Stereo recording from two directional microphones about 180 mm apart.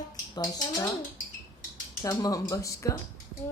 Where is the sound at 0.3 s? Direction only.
20° left (ahead or behind).